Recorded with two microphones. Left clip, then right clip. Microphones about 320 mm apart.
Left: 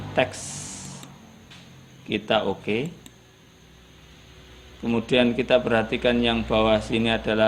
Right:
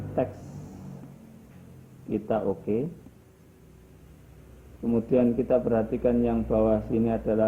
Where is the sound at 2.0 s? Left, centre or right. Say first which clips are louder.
Left 5 dB; left.